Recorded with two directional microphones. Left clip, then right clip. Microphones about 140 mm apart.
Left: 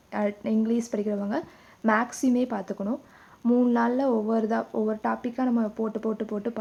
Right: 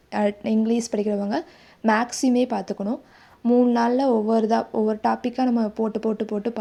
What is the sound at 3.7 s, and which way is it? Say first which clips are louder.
Speech: right 4 dB; 30° right (ahead or behind).